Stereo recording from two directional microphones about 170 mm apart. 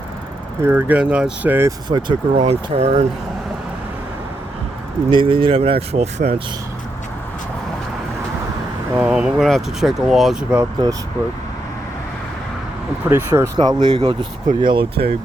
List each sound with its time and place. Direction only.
0.6 s speech: 10° right (ahead or behind)
1.9 s speech: 25° right (ahead or behind)
2.4 s speech: 35° right (ahead or behind)
5.1 s speech: 30° right (ahead or behind)
9.0 s speech: 10° right (ahead or behind)
10.6 s speech: 25° right (ahead or behind)
13.1 s speech: 15° right (ahead or behind)